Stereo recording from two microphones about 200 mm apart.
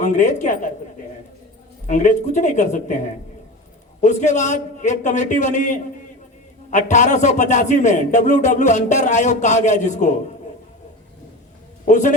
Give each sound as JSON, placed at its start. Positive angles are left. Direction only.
{"t": 0.0, "sound": "a man's voice", "side_deg": 35}
{"t": 1.9, "sound": "a man's voice", "side_deg": 40}
{"t": 11.9, "sound": "a man's voice", "side_deg": 40}